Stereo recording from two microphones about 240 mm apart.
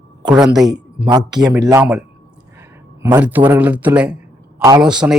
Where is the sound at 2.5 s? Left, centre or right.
Centre.